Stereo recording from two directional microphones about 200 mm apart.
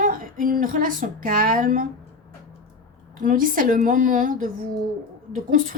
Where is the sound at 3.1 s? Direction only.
40° right (ahead or behind).